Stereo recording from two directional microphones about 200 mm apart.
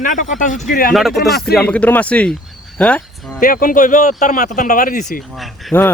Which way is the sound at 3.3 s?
45° left (ahead or behind).